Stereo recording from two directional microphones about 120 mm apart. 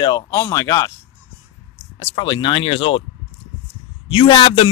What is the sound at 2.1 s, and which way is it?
Speech, 40° left (ahead or behind).